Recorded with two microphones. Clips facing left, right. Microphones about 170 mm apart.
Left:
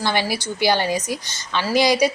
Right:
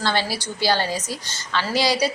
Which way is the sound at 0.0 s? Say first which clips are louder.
Left 2 dB; 15° left (ahead or behind).